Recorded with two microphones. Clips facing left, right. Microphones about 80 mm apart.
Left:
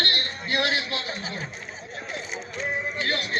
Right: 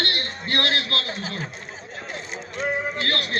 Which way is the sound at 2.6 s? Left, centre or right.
Right.